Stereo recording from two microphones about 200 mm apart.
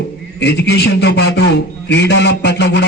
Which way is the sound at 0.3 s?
55° left (ahead or behind).